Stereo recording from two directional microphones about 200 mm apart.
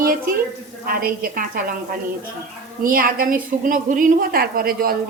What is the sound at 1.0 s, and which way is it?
Speech, 45° right (ahead or behind).